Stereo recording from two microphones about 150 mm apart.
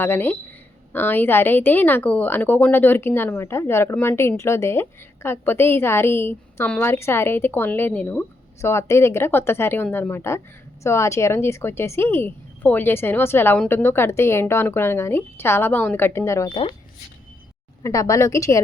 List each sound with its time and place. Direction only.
0.0 s a woman's voice: 15° left (ahead or behind)
17.8 s a woman's voice: 20° left (ahead or behind)